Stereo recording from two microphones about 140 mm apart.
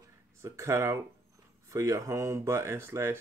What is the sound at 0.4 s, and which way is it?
Speech, 20° right (ahead or behind).